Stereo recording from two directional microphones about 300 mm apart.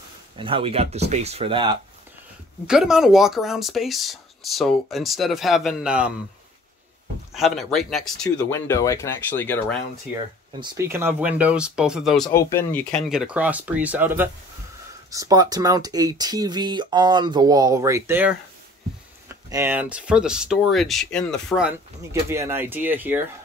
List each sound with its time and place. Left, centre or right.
0.4 s speech: centre
2.6 s speech: centre
7.3 s speech: centre
10.6 s speech: centre